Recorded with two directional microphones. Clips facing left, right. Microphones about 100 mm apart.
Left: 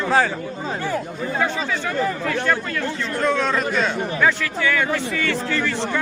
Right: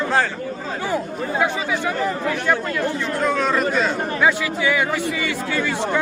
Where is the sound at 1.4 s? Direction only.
10° right (ahead or behind).